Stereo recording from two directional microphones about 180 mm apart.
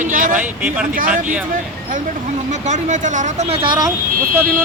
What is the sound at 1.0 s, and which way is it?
Speech, 50° right (ahead or behind).